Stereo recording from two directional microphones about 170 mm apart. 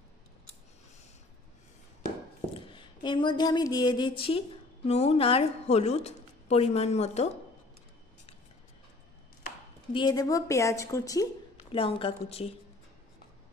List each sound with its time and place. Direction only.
2.5 s a sound: 30° left (ahead or behind)
9.9 s a woman's voice: 25° left (ahead or behind)
11.7 s a woman's voice: 35° left (ahead or behind)